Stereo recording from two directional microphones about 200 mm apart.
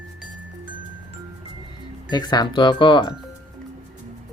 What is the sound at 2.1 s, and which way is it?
Speech, 20° left (ahead or behind).